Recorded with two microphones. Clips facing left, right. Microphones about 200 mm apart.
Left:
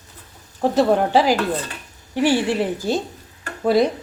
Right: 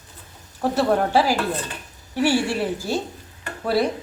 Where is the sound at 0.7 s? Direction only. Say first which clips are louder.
Left 3 dB; 15° left (ahead or behind).